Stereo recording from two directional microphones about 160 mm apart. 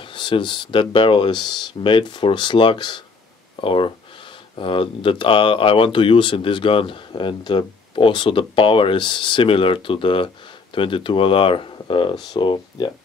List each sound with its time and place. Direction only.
0.0 s speech: 30° left (ahead or behind)